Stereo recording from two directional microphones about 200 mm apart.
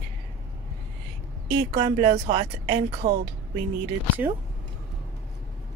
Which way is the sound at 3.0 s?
50° right (ahead or behind).